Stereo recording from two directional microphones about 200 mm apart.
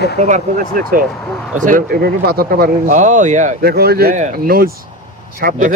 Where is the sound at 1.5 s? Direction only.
40° right (ahead or behind).